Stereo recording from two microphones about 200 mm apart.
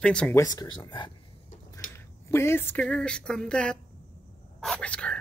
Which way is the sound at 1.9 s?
10° left (ahead or behind).